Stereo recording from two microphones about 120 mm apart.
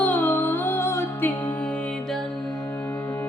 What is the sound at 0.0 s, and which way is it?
Music, 15° left (ahead or behind).